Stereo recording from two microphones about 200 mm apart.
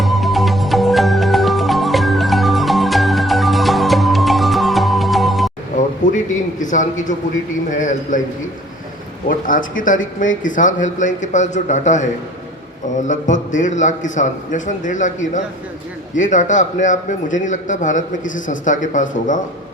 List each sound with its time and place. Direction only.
0.0 s music: centre (ahead or behind)
5.7 s a sound: 40° left (ahead or behind)
7.7 s a man's voice: 40° left (ahead or behind)
9.5 s a man's voice: 40° left (ahead or behind)
13.1 s a man's voice: 40° left (ahead or behind)